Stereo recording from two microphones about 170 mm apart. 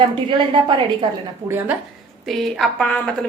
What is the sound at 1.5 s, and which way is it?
Speech, 15° right (ahead or behind).